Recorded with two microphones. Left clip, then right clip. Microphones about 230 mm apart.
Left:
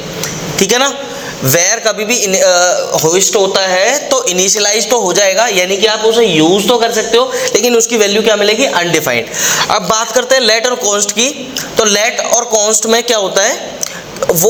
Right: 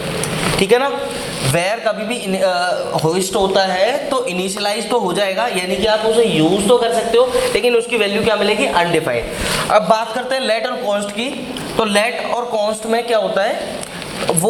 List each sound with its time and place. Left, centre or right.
0.6 s a man's voice: left